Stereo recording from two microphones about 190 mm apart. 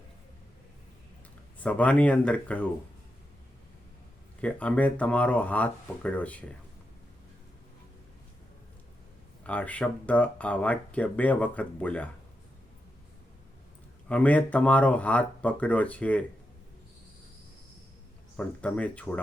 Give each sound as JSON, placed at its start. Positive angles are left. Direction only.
{"t": 1.5, "sound": "speech", "side_deg": 5}
{"t": 4.4, "sound": "speech", "side_deg": 5}
{"t": 9.4, "sound": "speech", "side_deg": 5}
{"t": 14.1, "sound": "speech", "side_deg": 5}
{"t": 18.3, "sound": "speech", "side_deg": 5}